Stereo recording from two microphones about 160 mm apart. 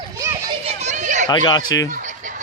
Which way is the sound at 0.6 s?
45° right (ahead or behind).